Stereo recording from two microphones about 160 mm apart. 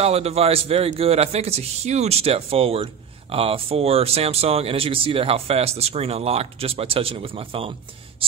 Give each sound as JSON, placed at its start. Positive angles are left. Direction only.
{"t": 0.0, "sound": "a man's voice", "side_deg": -40}
{"t": 8.2, "sound": "writing", "side_deg": -35}